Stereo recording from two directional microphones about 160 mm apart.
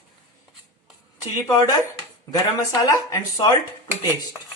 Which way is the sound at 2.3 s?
25° left (ahead or behind).